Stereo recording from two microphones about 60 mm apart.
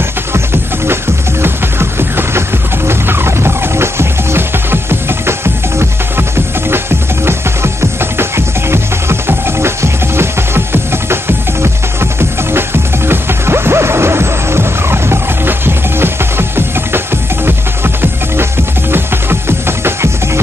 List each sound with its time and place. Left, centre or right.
1.4 s music: right
7.2 s music: right